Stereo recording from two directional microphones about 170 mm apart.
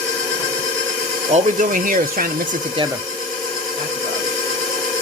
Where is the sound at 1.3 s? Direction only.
50° right (ahead or behind).